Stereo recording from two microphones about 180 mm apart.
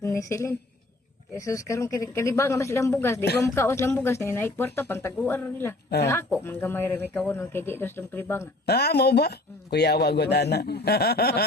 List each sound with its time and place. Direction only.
0.0 s a woman's voice: 15° left (ahead or behind)
8.6 s speech: 65° left (ahead or behind)